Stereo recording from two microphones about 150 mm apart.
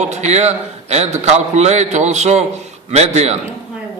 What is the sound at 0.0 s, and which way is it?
A man's voice, 50° right (ahead or behind).